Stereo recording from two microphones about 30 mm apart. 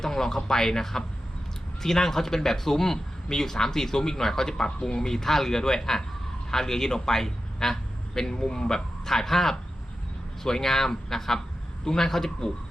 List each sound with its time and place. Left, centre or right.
0.0 s a man's voice: centre